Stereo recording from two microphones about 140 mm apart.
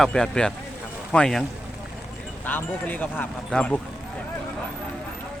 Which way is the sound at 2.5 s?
10° left (ahead or behind).